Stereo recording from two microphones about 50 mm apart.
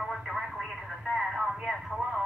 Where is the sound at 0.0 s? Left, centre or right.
Centre.